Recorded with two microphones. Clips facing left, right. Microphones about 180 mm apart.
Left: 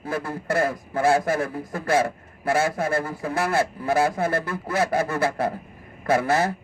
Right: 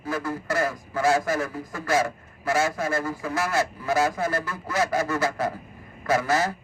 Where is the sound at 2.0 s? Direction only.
30° left (ahead or behind).